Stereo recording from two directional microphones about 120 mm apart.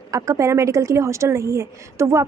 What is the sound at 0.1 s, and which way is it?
A woman's voice, 30° right (ahead or behind).